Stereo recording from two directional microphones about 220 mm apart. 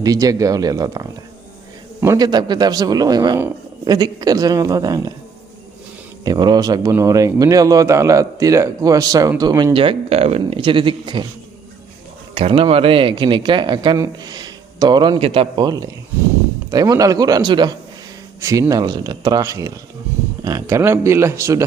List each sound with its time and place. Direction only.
0.0 s speech: 15° right (ahead or behind)
6.2 s speech: 20° right (ahead or behind)
12.3 s speech: 25° right (ahead or behind)